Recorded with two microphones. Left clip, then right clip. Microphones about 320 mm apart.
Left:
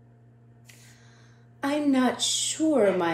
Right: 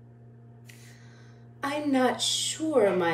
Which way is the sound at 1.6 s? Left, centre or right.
Centre.